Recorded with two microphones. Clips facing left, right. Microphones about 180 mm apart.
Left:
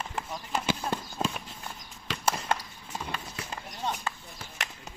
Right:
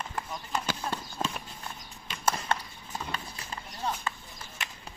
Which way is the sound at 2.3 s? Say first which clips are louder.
Even; 10° left (ahead or behind).